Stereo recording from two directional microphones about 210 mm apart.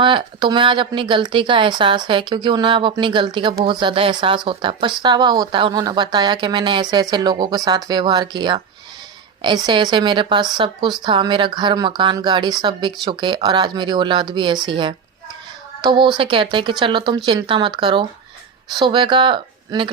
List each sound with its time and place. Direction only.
0.0 s speech: 20° right (ahead or behind)